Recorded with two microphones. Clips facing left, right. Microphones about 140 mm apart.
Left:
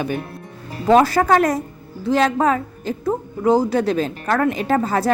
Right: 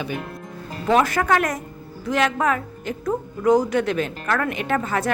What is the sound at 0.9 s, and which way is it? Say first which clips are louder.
A woman's voice: left 5 dB; 35° left (ahead or behind).